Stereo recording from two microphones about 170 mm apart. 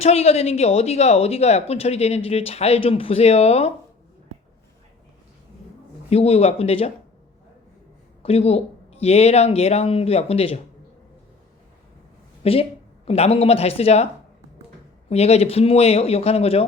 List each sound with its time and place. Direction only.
0.0 s speech: 40° left (ahead or behind)
6.1 s speech: 35° left (ahead or behind)
8.2 s speech: 35° left (ahead or behind)
12.4 s speech: 35° left (ahead or behind)
15.1 s speech: 40° left (ahead or behind)